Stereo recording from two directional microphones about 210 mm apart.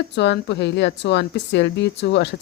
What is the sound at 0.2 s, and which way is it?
A woman's voice, 55° left (ahead or behind).